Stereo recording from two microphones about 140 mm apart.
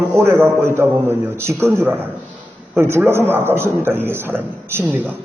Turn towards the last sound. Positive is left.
turn(degrees=-15)  # may be behind; listen again after turning